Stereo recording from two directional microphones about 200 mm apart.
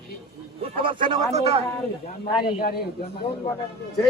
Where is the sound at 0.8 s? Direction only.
25° right (ahead or behind).